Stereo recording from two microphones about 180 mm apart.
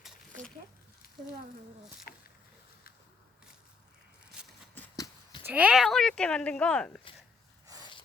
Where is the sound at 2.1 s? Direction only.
55° left (ahead or behind).